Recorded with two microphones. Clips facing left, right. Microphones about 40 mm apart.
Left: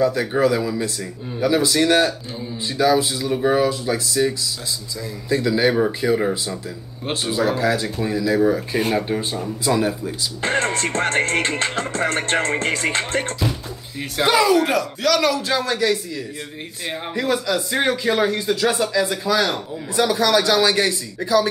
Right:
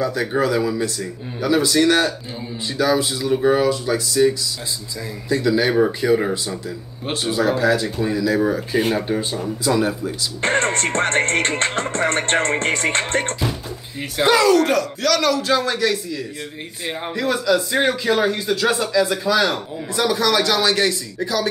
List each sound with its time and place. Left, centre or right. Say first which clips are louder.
0.2 s speech: even; centre
10.5 s music: right 1 dB; right
14.3 s speech: right 1 dB; centre
17.3 s speech: right 3 dB; centre